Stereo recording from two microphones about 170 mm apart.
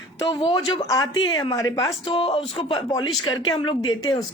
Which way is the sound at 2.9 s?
20° left (ahead or behind).